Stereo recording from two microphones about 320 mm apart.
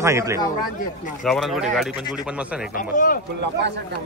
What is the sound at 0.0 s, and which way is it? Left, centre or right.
A man's voice, centre.